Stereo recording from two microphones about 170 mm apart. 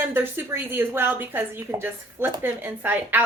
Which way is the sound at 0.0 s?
10° right (ahead or behind).